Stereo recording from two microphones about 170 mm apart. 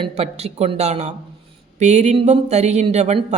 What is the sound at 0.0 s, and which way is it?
Speech, 40° right (ahead or behind).